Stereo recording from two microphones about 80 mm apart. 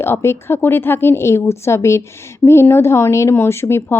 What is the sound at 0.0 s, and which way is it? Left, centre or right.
Speech, left.